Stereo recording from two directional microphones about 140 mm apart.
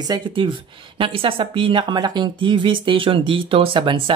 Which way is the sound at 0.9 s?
40° right (ahead or behind).